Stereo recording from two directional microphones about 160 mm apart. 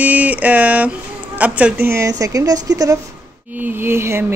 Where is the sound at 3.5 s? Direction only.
10° right (ahead or behind).